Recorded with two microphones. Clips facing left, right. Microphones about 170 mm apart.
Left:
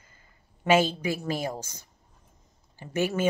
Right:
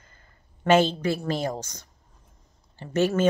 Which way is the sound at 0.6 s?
10° left (ahead or behind).